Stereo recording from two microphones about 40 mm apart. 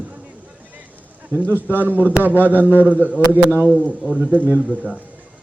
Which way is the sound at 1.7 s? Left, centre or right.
Right.